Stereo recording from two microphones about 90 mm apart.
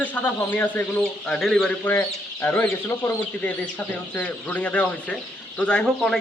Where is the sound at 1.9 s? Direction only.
20° left (ahead or behind).